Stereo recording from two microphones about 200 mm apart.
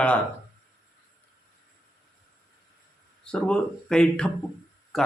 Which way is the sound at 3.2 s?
5° left (ahead or behind).